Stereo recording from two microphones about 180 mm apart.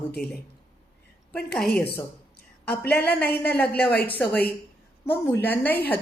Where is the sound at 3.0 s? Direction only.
65° left (ahead or behind).